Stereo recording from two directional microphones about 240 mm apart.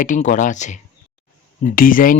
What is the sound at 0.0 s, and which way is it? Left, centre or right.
A man's voice, left.